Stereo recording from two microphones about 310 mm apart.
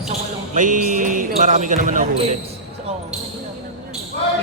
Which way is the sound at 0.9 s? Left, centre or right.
Right.